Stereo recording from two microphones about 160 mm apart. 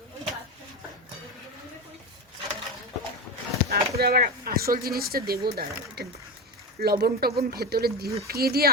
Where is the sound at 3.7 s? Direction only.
75° right (ahead or behind).